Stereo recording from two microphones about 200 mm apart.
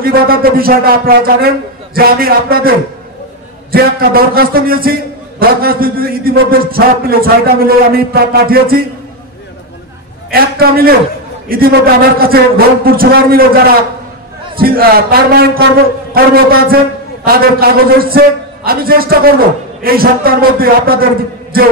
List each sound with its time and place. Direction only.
0.0 s a man's voice: 50° right (ahead or behind)
3.7 s a man's voice: 50° right (ahead or behind)
10.3 s a man's voice: 50° right (ahead or behind)
14.6 s a man's voice: 50° right (ahead or behind)